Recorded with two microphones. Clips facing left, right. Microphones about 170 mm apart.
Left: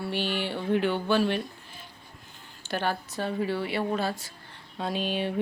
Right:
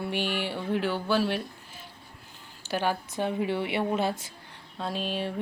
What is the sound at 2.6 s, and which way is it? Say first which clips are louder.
Speech: right 1 dB; 10° right (ahead or behind).